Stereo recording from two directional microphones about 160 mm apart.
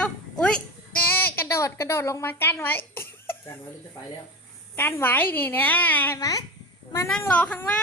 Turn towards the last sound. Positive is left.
turn(degrees=10)  # may be behind; listen again after turning